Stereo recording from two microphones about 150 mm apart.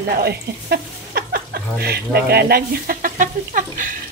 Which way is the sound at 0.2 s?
90° right.